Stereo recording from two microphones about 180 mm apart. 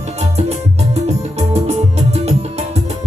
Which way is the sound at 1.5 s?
35° right (ahead or behind).